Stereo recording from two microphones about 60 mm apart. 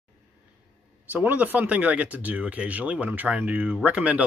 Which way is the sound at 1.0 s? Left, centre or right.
Right.